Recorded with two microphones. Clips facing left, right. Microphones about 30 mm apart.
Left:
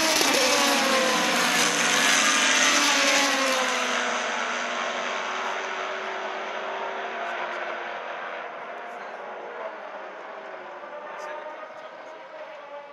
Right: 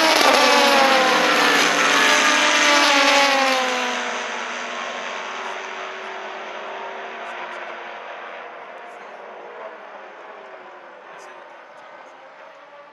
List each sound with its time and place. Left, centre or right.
0.0 s vehicle: right
1.6 s vehicle: centre
2.7 s vehicle: right
3.5 s vehicle: centre